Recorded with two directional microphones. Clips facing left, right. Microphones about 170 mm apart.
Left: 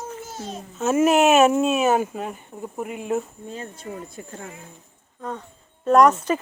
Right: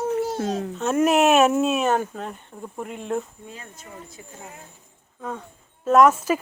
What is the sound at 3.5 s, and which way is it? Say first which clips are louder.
Speech: left 10 dB; 35° left (ahead or behind).